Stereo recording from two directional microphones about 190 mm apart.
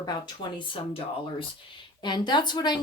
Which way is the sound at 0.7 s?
30° left (ahead or behind).